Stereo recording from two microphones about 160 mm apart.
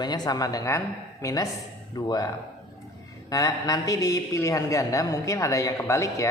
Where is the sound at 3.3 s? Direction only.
20° left (ahead or behind).